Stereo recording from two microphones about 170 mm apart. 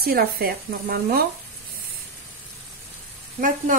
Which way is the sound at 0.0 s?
65° right (ahead or behind).